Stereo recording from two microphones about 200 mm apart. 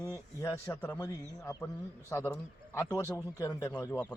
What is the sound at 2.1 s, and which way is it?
A man's voice, 15° left (ahead or behind).